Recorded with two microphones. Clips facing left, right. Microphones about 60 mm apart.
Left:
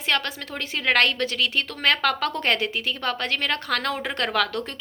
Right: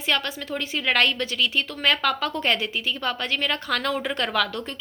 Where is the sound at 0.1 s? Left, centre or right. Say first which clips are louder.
Even; left.